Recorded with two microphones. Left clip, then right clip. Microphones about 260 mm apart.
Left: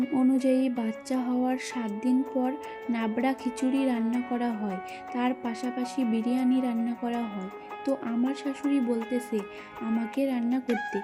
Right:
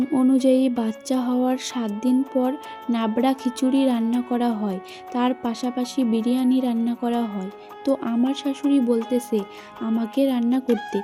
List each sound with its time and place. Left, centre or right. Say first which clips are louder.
0.1 s speech: right 7 dB; right